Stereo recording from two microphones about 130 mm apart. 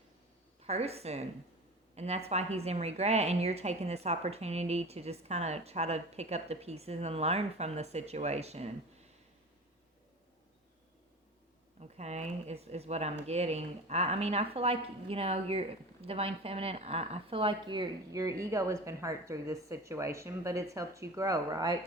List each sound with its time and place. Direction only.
0.6 s a woman's voice: 55° right (ahead or behind)
11.8 s speech: 60° right (ahead or behind); by 21.8 s 30° right (ahead or behind)